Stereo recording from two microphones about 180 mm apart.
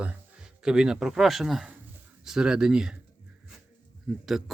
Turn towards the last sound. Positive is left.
turn(degrees=-5)  # may be behind; listen again after turning